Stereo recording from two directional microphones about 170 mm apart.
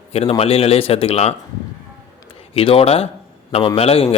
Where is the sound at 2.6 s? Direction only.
35° left (ahead or behind).